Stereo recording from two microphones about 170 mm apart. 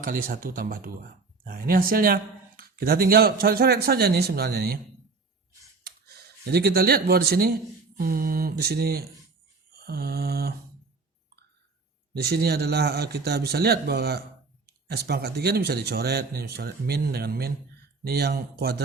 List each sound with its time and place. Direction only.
0.0 s speech: 55° right (ahead or behind)
5.8 s speech: 70° right (ahead or behind)
9.7 s mantra: 65° right (ahead or behind)
12.1 s a man's voice: 70° right (ahead or behind)